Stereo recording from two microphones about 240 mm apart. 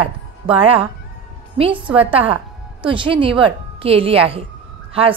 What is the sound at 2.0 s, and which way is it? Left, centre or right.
A woman's voice, right.